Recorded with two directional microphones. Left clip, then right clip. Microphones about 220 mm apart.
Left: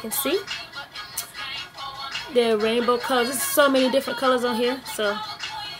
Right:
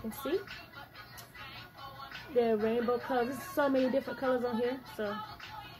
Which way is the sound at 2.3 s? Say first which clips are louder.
Left 9 dB; 25° left (ahead or behind).